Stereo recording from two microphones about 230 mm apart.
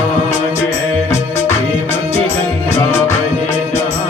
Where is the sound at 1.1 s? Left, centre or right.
Centre.